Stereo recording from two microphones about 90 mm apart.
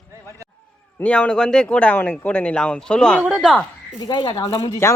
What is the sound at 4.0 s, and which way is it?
Speech, 55° left (ahead or behind).